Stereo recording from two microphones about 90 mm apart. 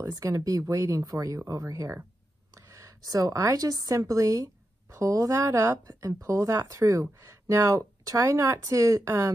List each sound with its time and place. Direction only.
0.1 s speech: 40° right (ahead or behind)